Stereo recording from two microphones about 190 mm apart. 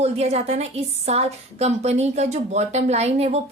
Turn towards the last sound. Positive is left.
turn(degrees=-35)  # may be behind; listen again after turning